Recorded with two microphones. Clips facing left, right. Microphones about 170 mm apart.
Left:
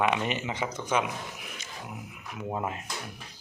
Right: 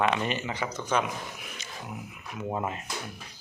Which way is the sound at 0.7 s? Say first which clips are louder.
Right 1 dB; 10° left (ahead or behind).